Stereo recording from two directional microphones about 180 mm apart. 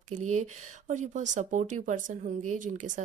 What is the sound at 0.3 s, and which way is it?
Speech, 45° right (ahead or behind).